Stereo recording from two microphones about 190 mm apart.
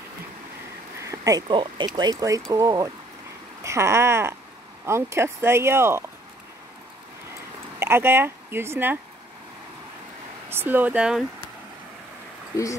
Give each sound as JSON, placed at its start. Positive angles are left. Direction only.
{"t": 1.0, "sound": "speech", "side_deg": -15}
{"t": 7.8, "sound": "speech", "side_deg": -10}
{"t": 10.5, "sound": "speech", "side_deg": -10}